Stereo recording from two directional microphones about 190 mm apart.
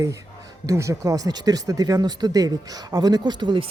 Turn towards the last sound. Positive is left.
turn(degrees=-25)  # may be behind; listen again after turning